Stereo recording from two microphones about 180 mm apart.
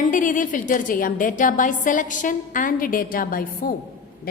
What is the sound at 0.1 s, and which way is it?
A woman's voice, 45° left (ahead or behind).